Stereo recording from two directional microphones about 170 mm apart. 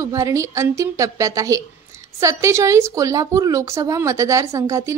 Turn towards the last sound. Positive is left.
turn(degrees=-20)  # may be behind; listen again after turning